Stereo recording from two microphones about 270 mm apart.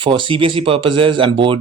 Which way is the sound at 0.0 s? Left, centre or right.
Centre.